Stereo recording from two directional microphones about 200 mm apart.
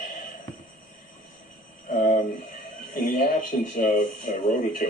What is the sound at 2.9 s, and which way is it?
Speech, 40° left (ahead or behind).